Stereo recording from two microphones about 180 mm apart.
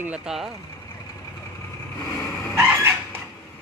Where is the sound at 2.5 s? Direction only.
10° right (ahead or behind).